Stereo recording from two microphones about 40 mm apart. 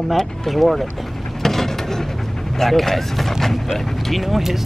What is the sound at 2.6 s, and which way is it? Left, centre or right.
Speech, centre.